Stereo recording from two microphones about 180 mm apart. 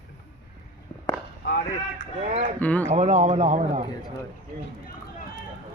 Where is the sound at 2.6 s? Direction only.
10° left (ahead or behind).